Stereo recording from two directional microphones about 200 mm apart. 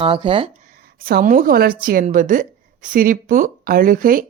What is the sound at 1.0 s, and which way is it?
A woman's voice, 45° right (ahead or behind).